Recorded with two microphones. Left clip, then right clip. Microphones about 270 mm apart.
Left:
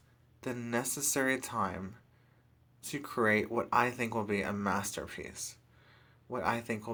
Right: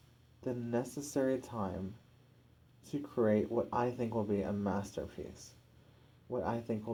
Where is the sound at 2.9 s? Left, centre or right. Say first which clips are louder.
Left 2 dB; left.